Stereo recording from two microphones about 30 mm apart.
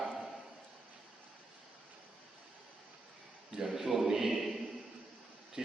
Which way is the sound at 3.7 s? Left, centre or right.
Centre.